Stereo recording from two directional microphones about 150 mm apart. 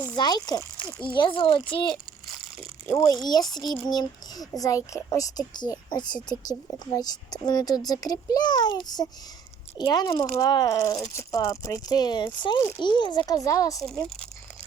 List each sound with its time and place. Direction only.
0.0 s a child's voice: 30° left (ahead or behind)
3.0 s a woman's voice: 25° left (ahead or behind)
13.8 s speech: 5° left (ahead or behind)